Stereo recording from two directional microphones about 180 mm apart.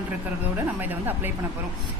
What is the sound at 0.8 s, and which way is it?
Speech, 10° right (ahead or behind).